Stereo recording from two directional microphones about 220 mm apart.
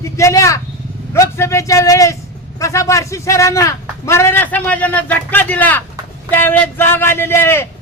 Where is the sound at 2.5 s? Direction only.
15° left (ahead or behind).